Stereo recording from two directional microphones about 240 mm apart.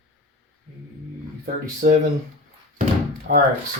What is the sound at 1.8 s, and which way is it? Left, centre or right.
Speech, right.